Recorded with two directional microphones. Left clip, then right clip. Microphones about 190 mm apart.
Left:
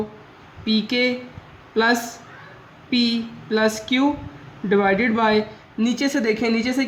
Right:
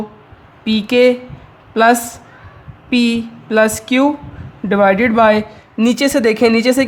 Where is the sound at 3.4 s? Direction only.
50° right (ahead or behind).